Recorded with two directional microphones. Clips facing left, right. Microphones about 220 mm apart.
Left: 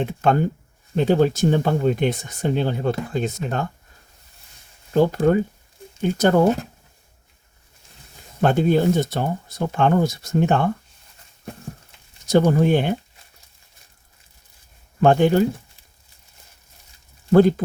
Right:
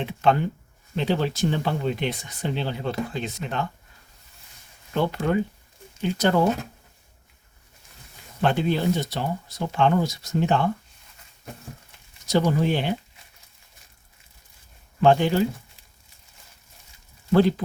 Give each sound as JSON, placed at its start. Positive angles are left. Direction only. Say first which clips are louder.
{"t": 0.0, "sound": "speech", "louder": "left 3 dB", "side_deg": 45}
{"t": 4.9, "sound": "speech", "louder": "left 6 dB", "side_deg": 40}
{"t": 8.4, "sound": "speech", "louder": "left 5 dB", "side_deg": 45}
{"t": 12.3, "sound": "speech", "louder": "left 5 dB", "side_deg": 50}
{"t": 15.0, "sound": "speech", "louder": "left 3 dB", "side_deg": 50}